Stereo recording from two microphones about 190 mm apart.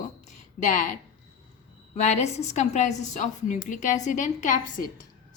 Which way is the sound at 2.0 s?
35° left (ahead or behind).